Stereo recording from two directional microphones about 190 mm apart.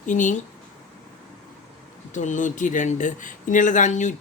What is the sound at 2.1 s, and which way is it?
Speech, 40° left (ahead or behind).